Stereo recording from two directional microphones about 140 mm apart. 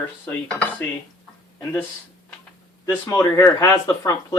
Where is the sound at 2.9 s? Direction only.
20° left (ahead or behind).